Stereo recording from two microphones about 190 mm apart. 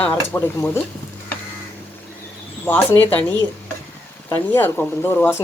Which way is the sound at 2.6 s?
10° left (ahead or behind).